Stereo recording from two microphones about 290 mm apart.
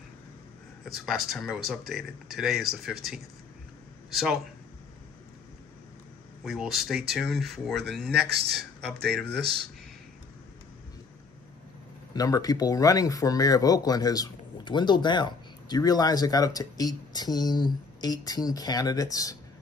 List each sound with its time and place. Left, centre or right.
1.0 s speech: centre
6.4 s speech: centre
8.1 s speech: right
12.1 s speech: centre